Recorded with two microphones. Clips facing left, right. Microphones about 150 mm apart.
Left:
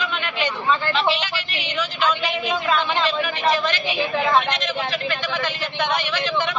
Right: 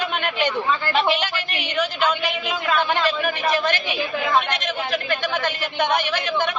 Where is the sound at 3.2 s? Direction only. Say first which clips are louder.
Even; 50° right (ahead or behind).